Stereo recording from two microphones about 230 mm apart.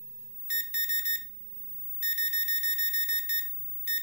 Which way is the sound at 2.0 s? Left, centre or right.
Left.